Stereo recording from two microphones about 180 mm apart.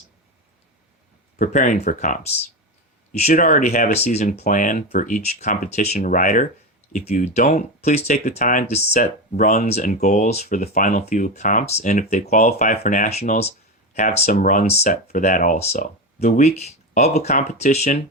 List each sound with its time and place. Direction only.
1.4 s speech: 45° left (ahead or behind)
4.4 s speech: 45° left (ahead or behind)